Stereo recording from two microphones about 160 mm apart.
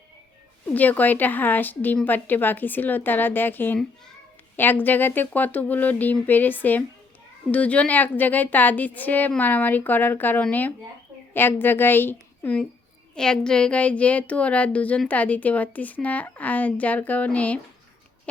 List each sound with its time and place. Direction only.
0.7 s a woman's voice: 10° left (ahead or behind)